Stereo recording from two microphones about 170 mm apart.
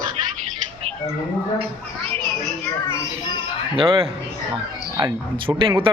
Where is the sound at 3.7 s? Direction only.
30° right (ahead or behind).